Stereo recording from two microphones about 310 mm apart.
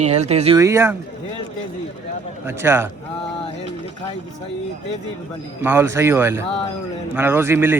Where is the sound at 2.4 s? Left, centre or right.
Centre.